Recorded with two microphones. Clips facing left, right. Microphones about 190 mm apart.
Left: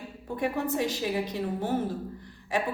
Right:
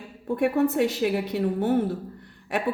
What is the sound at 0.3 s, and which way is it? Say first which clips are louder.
A woman's voice: right 7 dB; 60° right (ahead or behind).